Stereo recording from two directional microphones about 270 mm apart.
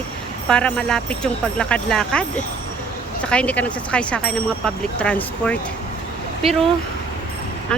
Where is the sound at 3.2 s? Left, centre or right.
Centre.